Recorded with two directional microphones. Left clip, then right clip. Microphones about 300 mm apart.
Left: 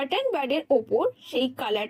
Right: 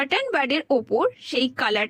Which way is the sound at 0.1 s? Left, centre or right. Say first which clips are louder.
Right 3 dB; right.